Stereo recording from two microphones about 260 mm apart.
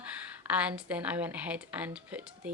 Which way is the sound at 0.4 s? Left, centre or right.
Centre.